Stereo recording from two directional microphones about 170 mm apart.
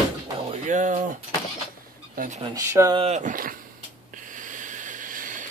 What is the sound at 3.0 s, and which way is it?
Speech, 40° right (ahead or behind).